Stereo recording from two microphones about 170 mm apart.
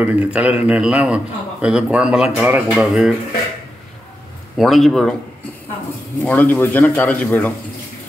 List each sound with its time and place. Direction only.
0.0 s a man's voice: 10° right (ahead or behind)
4.6 s speech: centre (ahead or behind)
6.2 s speech: 10° left (ahead or behind)